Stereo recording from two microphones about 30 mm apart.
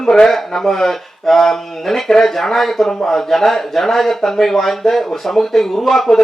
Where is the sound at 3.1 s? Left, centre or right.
Centre.